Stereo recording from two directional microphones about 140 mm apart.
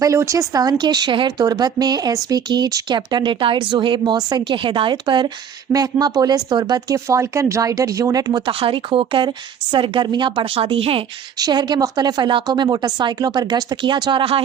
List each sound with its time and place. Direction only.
0.0 s a woman's voice: 20° right (ahead or behind); by 11.0 s 40° right (ahead or behind)
11.3 s a woman's voice: 30° right (ahead or behind)